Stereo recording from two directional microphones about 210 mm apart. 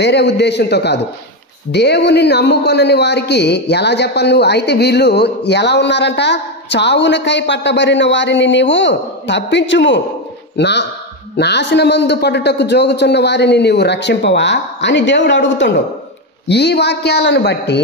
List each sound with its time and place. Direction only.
0.0 s a man's voice: 55° left (ahead or behind)